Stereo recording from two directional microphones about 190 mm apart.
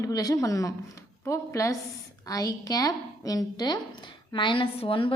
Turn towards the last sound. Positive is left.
turn(degrees=30)  # may be behind; listen again after turning